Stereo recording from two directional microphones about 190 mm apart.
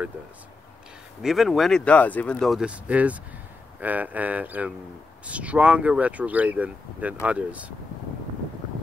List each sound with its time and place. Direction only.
1.2 s speech: centre (ahead or behind)